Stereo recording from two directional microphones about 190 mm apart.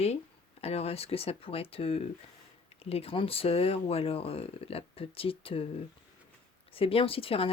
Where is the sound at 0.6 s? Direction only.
35° left (ahead or behind).